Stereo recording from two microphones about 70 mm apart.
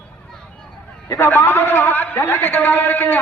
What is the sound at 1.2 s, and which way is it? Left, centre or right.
A man's voice, left.